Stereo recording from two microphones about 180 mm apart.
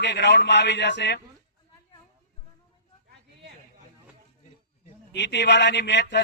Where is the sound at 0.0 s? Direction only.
70° left (ahead or behind).